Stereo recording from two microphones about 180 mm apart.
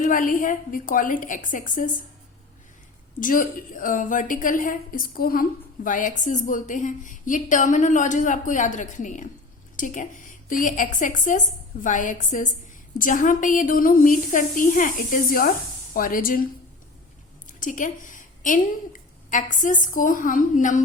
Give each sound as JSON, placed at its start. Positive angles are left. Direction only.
{"t": 0.0, "sound": "a woman's voice", "side_deg": 45}
{"t": 3.2, "sound": "a woman's voice", "side_deg": 50}
{"t": 17.4, "sound": "a woman's voice", "side_deg": 45}